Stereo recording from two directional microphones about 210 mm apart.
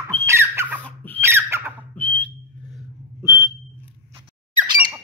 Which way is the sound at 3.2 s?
15° right (ahead or behind).